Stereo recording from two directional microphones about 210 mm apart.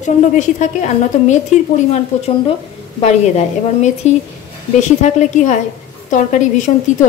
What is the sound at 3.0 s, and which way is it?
A woman's voice, 30° left (ahead or behind).